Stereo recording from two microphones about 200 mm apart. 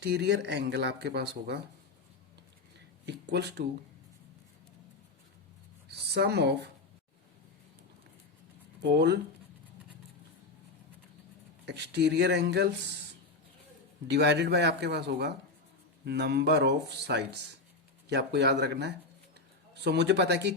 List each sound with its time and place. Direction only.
0.0 s speech: 55° right (ahead or behind)
3.1 s speech: 55° right (ahead or behind)
5.9 s speech: 55° right (ahead or behind)
8.8 s speech: 60° right (ahead or behind)
11.6 s speech: 60° right (ahead or behind)
14.1 s speech: 55° right (ahead or behind)